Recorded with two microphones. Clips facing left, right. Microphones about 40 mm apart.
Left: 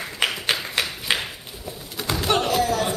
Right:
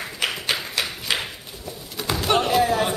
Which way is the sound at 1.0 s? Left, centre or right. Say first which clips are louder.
Left 1 dB; centre.